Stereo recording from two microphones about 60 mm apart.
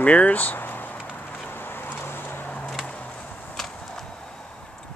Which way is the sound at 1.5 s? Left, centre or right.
Left.